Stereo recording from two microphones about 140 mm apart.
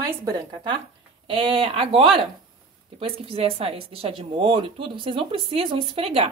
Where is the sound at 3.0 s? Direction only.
40° right (ahead or behind).